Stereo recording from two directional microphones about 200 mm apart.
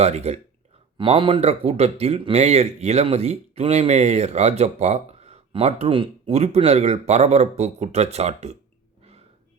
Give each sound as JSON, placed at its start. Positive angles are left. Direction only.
{"t": 0.0, "sound": "speech", "side_deg": -30}